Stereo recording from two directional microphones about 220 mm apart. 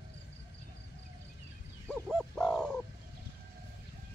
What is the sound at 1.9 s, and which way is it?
Bird, 5° left (ahead or behind).